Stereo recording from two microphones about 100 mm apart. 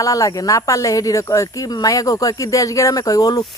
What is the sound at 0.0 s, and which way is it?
Speech, 35° left (ahead or behind).